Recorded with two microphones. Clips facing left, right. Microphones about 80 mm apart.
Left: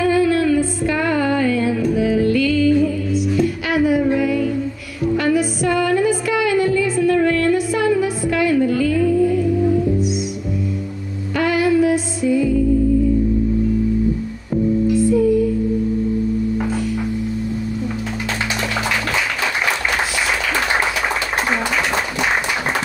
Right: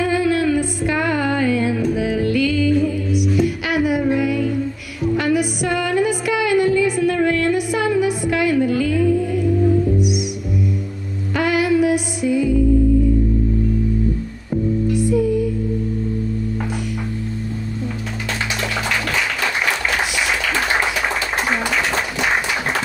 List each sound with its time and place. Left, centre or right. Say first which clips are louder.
0.3 s music: left 2 dB; centre
3.7 s female singing: left 3 dB; centre
5.1 s music: left 1 dB; centre
11.3 s music: left 1 dB; centre
21.5 s a sound: even; centre